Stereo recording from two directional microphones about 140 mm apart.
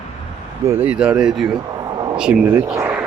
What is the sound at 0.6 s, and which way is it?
Speech, 15° right (ahead or behind).